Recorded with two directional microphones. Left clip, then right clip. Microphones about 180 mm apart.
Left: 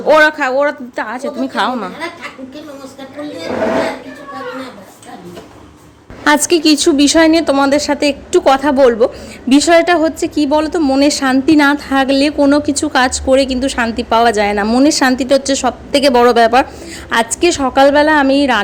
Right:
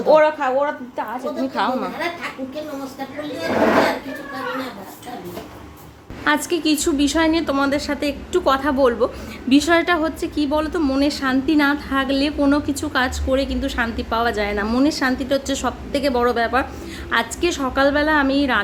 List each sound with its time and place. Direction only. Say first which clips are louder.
0.1 s a woman's voice: left 5 dB; 55° left (ahead or behind)
1.5 s a woman's voice: left 5 dB; 35° left (ahead or behind)
6.2 s a woman's voice: left 8 dB; 40° left (ahead or behind)
11.0 s a woman's voice: left 8 dB; 40° left (ahead or behind)
14.8 s a woman's voice: left 8 dB; 40° left (ahead or behind)